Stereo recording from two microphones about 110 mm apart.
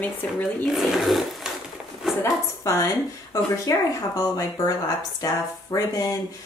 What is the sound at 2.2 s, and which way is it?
A woman's voice, 25° left (ahead or behind).